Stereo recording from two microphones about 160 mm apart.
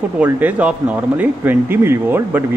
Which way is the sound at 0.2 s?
10° right (ahead or behind).